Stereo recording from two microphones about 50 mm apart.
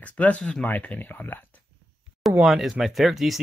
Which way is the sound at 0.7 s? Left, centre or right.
Left.